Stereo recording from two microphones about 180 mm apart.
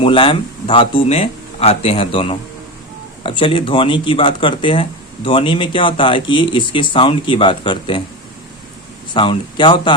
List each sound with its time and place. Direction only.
0.0 s speech: 30° left (ahead or behind)
9.1 s speech: 25° left (ahead or behind)